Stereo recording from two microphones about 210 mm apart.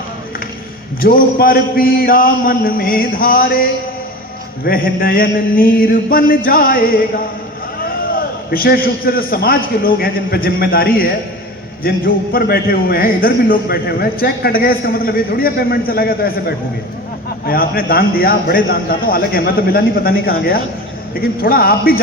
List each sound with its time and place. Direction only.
1.0 s a man's voice: 45° left (ahead or behind)
8.4 s a man's voice: 45° left (ahead or behind)